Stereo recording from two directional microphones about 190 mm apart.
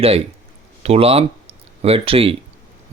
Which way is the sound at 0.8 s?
30° right (ahead or behind).